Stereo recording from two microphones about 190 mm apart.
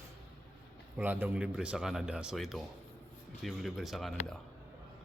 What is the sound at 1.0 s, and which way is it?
Speech, 10° right (ahead or behind).